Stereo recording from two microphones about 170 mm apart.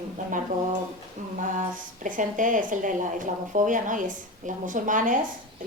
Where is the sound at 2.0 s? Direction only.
50° right (ahead or behind).